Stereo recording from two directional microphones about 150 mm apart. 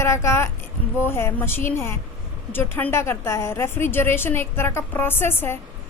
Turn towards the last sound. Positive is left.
turn(degrees=15)  # may be behind; listen again after turning